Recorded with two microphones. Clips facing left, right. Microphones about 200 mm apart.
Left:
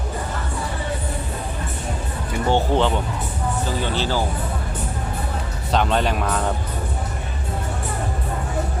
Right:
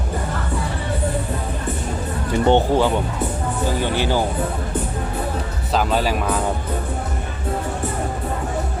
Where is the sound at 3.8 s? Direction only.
15° right (ahead or behind).